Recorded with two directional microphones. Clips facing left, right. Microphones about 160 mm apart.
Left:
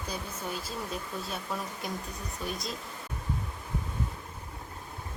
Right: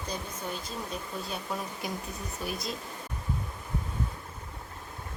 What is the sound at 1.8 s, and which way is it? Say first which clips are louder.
Speech: right 1 dB; centre (ahead or behind).